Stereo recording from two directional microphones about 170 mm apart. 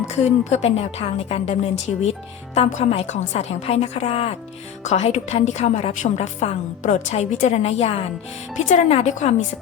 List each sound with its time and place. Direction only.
0.1 s a woman's voice: 40° left (ahead or behind)
2.6 s a woman's voice: 40° left (ahead or behind)